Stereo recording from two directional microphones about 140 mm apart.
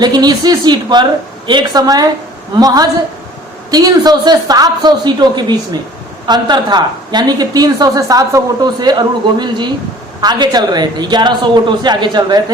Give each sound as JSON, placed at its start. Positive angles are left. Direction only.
{"t": 0.0, "sound": "a woman's voice", "side_deg": -30}